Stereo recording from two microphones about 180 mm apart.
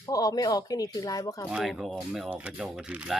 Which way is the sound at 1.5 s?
5° right (ahead or behind).